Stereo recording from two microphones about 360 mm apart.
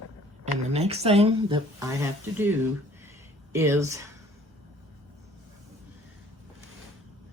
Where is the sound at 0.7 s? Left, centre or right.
Centre.